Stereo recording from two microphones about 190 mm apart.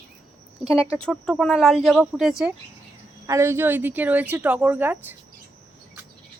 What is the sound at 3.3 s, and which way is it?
Speech, 15° right (ahead or behind).